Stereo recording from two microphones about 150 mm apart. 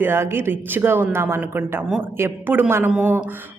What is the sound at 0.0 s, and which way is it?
Speech, 15° right (ahead or behind).